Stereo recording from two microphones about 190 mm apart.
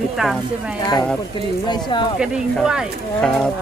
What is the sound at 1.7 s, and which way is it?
Speech, 25° left (ahead or behind).